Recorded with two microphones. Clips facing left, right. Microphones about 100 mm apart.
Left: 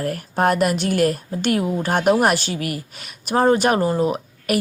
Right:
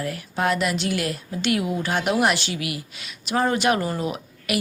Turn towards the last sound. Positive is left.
turn(degrees=40)  # may be behind; listen again after turning